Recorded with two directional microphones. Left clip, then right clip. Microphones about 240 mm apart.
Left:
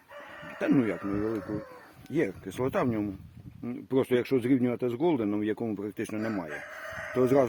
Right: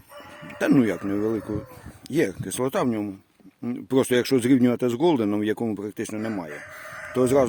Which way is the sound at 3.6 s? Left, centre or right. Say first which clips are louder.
Right 5 dB; right.